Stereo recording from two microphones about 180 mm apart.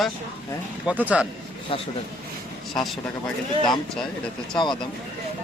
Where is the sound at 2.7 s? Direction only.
Centre (ahead or behind).